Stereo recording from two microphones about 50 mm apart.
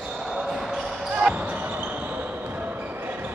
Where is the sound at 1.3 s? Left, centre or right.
Right.